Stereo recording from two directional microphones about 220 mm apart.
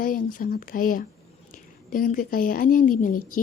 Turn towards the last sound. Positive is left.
turn(degrees=40)  # may be behind; listen again after turning